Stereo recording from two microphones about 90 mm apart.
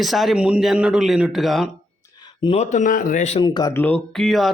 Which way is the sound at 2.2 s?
60° left (ahead or behind).